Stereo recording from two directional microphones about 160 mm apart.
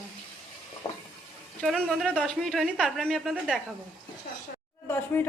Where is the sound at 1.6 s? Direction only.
Centre (ahead or behind).